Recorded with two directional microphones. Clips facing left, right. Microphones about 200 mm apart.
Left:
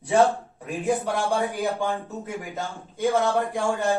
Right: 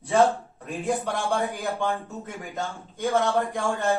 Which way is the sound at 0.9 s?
Centre (ahead or behind).